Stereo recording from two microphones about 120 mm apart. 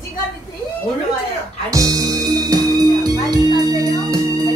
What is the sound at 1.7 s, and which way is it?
Music, 30° right (ahead or behind).